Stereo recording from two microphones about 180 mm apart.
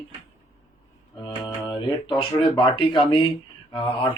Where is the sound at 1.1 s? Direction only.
25° left (ahead or behind).